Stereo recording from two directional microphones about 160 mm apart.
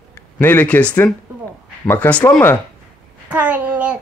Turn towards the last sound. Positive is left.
turn(degrees=-10)  # may be behind; listen again after turning